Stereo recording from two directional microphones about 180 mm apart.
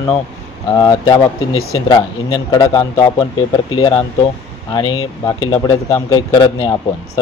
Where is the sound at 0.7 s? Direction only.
25° left (ahead or behind).